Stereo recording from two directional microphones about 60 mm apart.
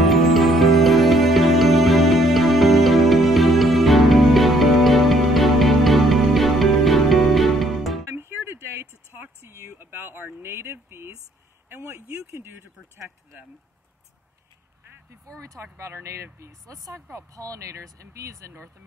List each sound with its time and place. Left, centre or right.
0.0 s music: centre
8.1 s a sound: right
15.4 s speech: right